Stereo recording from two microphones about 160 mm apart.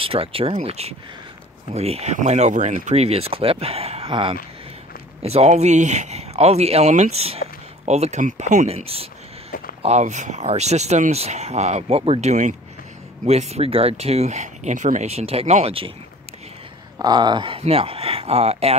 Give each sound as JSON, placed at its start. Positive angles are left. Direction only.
{"t": 0.0, "sound": "speech", "side_deg": -35}
{"t": 17.0, "sound": "speech", "side_deg": -25}